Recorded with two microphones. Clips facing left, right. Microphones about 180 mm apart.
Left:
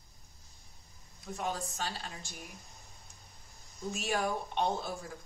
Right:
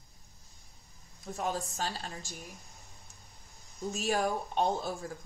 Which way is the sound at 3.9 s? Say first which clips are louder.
Right 2 dB; 40° right (ahead or behind).